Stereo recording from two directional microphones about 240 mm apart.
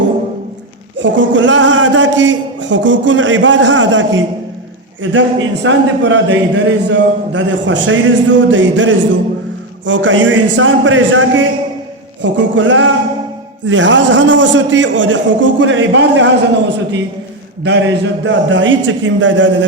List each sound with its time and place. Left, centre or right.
0.9 s a man's voice: right